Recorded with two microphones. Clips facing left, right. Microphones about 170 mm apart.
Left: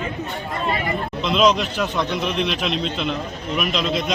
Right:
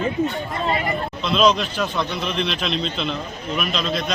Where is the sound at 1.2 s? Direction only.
15° left (ahead or behind).